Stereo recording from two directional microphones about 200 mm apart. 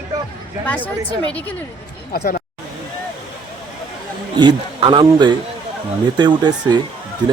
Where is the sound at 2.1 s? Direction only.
45° left (ahead or behind).